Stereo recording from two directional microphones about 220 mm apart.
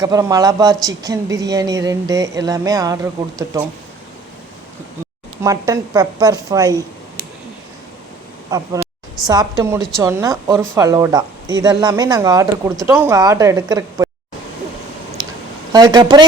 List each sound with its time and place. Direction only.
0.0 s speech: 15° right (ahead or behind)
5.4 s speech: 15° right (ahead or behind)
8.4 s speech: 15° right (ahead or behind)
15.7 s speech: 20° right (ahead or behind)